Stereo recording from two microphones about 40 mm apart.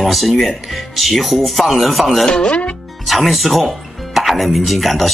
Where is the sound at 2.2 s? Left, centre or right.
Left.